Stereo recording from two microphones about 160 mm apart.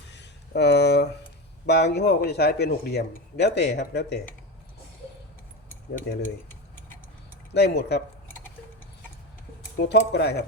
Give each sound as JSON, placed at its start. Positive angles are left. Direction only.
{"t": 0.1, "sound": "a sound", "side_deg": 90}
{"t": 1.6, "sound": "speech", "side_deg": 90}
{"t": 7.5, "sound": "speech", "side_deg": 90}
{"t": 9.7, "sound": "speech", "side_deg": 90}